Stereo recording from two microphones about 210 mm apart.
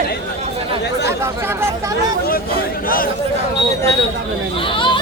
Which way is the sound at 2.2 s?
45° left (ahead or behind).